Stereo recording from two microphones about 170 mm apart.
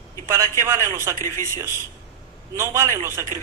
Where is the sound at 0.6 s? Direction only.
15° right (ahead or behind).